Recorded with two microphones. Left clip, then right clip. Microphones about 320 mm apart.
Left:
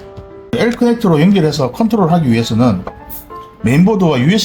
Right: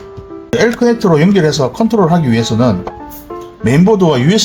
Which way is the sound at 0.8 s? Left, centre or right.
Centre.